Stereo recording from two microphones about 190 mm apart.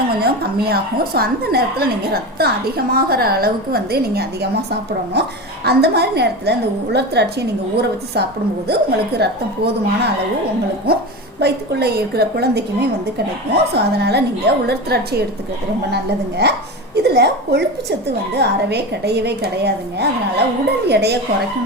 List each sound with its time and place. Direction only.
0.2 s a woman's voice: 55° right (ahead or behind)
16.4 s a woman's voice: 60° right (ahead or behind)